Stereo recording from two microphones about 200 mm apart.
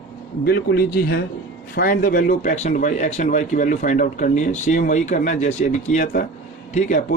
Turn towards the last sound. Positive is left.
turn(degrees=35)  # may be behind; listen again after turning